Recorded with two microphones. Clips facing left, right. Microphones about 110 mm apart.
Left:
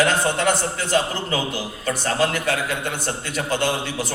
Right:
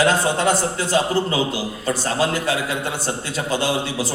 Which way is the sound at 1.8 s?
30° right (ahead or behind).